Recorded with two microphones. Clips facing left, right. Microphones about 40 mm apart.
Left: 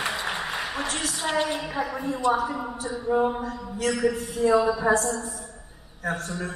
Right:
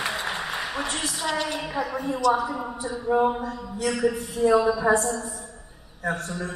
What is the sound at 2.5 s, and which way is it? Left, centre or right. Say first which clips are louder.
Speech: even; centre.